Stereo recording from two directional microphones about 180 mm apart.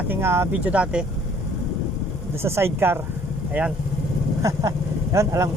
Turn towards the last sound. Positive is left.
turn(degrees=-15)  # may be behind; listen again after turning